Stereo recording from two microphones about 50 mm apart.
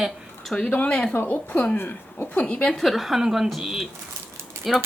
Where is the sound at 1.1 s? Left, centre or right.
Left.